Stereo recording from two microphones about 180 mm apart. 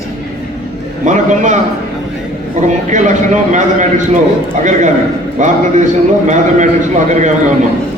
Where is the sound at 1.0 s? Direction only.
45° right (ahead or behind).